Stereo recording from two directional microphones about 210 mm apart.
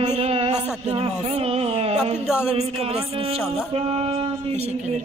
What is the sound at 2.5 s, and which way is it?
Music, 30° right (ahead or behind).